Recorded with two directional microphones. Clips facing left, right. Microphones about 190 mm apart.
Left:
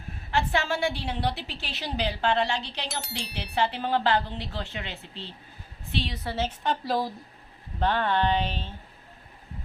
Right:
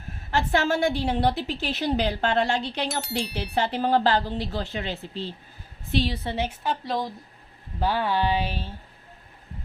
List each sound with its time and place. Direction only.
0.3 s a woman's voice: 45° right (ahead or behind)
2.9 s a woman's voice: centre (ahead or behind)
3.5 s speech: 40° right (ahead or behind)
6.2 s a woman's voice: 15° right (ahead or behind); by 7.1 s centre (ahead or behind)
7.8 s speech: 10° right (ahead or behind)